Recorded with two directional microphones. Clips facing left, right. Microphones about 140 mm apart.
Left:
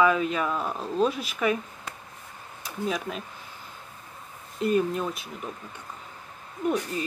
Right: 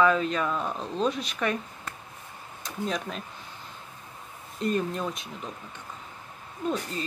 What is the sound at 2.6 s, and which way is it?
Speech, 5° left (ahead or behind).